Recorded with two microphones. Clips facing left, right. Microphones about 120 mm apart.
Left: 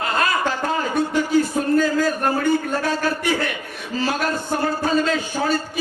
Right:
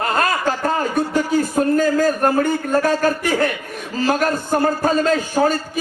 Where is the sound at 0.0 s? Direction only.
45° right (ahead or behind).